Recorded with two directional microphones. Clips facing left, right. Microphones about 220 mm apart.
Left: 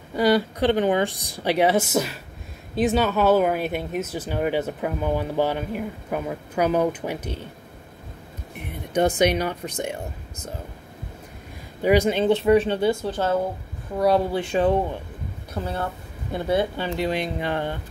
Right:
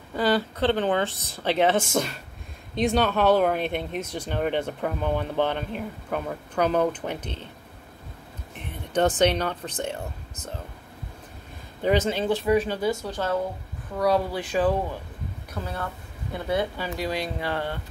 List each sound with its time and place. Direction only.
0.1 s speech: 15° left (ahead or behind)
8.5 s speech: 10° left (ahead or behind)
11.8 s speech: 10° left (ahead or behind)
12.4 s speech: 25° left (ahead or behind)